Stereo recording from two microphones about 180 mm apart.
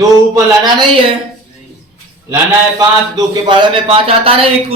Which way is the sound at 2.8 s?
25° right (ahead or behind).